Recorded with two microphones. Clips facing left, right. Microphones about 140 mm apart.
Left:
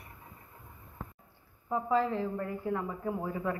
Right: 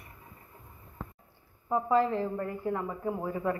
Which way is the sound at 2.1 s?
Centre (ahead or behind).